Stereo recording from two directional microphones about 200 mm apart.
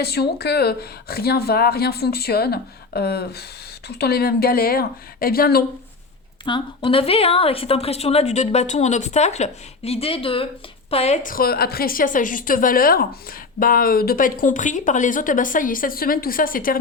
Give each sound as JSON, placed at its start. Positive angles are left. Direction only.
{"t": 0.0, "sound": "a woman's voice", "side_deg": 55}
{"t": 6.4, "sound": "a woman's voice", "side_deg": 25}